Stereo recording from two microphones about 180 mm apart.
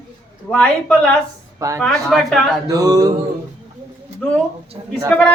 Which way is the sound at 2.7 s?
20° right (ahead or behind).